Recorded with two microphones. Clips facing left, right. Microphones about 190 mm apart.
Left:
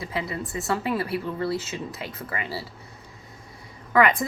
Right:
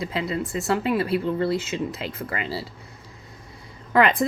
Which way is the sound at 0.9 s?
20° right (ahead or behind).